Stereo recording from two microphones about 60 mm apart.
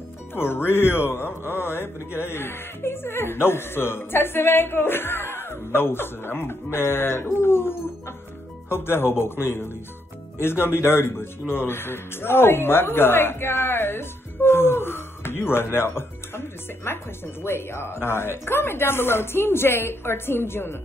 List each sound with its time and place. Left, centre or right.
0.4 s a man's voice: left